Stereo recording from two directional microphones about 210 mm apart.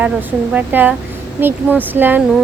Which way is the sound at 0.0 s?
10° right (ahead or behind).